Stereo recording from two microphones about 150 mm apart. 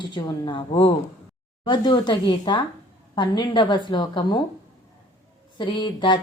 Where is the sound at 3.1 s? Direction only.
30° left (ahead or behind).